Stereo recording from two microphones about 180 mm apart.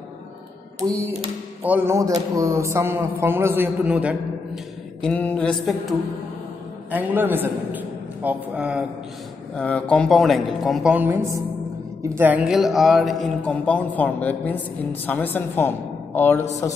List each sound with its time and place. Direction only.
0.7 s speech: 15° right (ahead or behind)
5.0 s a woman's voice: 10° left (ahead or behind)
6.9 s a man's voice: 10° right (ahead or behind)
9.6 s a woman's voice: 5° left (ahead or behind)